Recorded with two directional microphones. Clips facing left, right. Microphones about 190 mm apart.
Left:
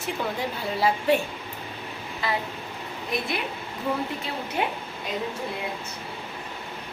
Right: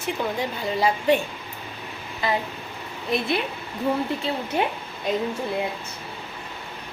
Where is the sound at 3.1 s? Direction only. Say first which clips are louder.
Right 5 dB; 25° right (ahead or behind).